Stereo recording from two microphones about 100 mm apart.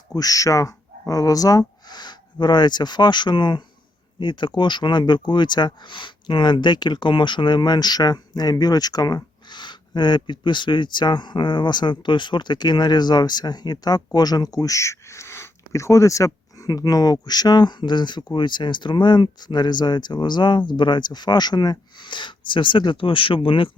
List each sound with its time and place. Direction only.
0.1 s speech: 40° left (ahead or behind); by 23.7 s 60° left (ahead or behind)